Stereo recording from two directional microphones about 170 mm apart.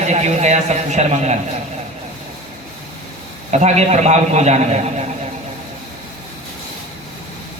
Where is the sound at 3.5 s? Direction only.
40° right (ahead or behind).